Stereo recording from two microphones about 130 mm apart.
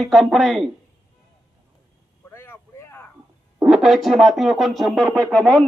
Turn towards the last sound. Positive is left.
turn(degrees=5)  # may be behind; listen again after turning